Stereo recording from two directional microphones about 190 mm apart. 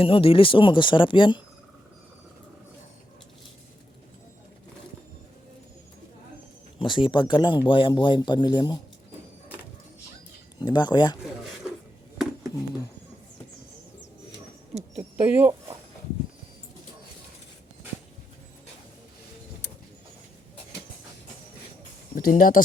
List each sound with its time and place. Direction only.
0.0 s speech: 30° left (ahead or behind)
6.7 s speech: 25° left (ahead or behind)
10.6 s speech: 25° left (ahead or behind)
12.1 s a sound: 5° right (ahead or behind)
15.1 s speech: 10° right (ahead or behind)
22.1 s speech: 45° left (ahead or behind)